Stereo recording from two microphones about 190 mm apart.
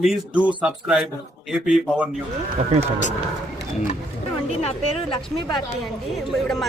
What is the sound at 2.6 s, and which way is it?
Speech, 35° right (ahead or behind).